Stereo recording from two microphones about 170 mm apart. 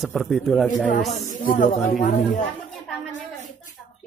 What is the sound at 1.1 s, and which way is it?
Speech, 50° left (ahead or behind).